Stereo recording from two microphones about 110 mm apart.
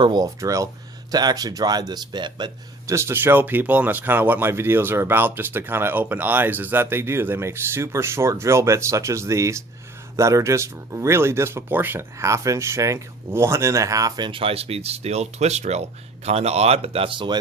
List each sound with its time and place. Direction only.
0.0 s speech: 40° right (ahead or behind)
0.3 s speech: 30° right (ahead or behind)
2.8 s speech: 25° right (ahead or behind)
14.3 s speech: 55° right (ahead or behind)